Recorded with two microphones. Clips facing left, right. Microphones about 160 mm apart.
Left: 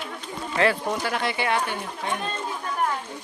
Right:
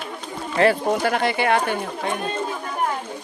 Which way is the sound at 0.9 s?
55° right (ahead or behind).